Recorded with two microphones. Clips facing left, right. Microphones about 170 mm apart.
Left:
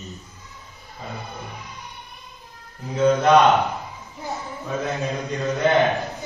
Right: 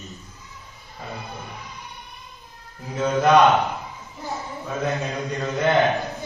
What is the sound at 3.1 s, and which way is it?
Speech, centre (ahead or behind).